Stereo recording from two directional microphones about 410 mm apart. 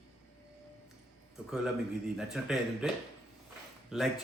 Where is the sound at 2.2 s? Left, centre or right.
Centre.